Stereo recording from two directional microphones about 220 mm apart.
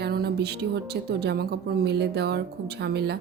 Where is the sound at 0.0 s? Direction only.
45° right (ahead or behind).